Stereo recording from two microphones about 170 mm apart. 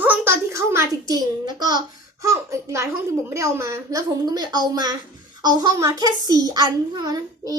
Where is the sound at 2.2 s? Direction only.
20° right (ahead or behind).